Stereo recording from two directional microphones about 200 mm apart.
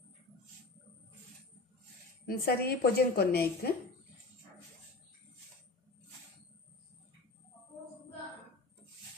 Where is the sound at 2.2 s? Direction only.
50° left (ahead or behind).